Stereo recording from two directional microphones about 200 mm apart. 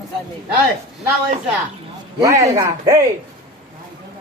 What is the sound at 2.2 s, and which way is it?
Speech, 15° right (ahead or behind).